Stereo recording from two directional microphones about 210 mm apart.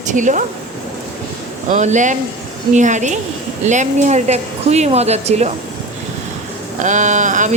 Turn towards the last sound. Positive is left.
turn(degrees=-35)  # may be behind; listen again after turning